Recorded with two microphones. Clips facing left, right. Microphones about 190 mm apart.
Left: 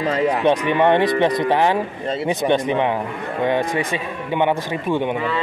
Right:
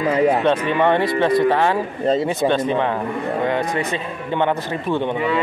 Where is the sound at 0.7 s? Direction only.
20° left (ahead or behind).